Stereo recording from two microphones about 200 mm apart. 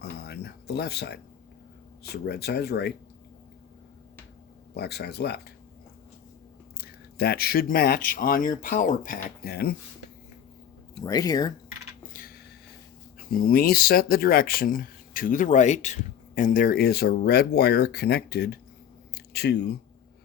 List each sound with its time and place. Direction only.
0.0 s speech: 55° left (ahead or behind)
4.7 s speech: 55° left (ahead or behind)
6.7 s speech: 50° left (ahead or behind)
11.0 s speech: 20° left (ahead or behind)
13.3 s speech: 45° left (ahead or behind)
19.1 s a sound: 55° left (ahead or behind)